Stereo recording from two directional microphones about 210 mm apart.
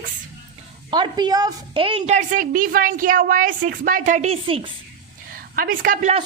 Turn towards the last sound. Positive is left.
turn(degrees=-35)  # may be behind; listen again after turning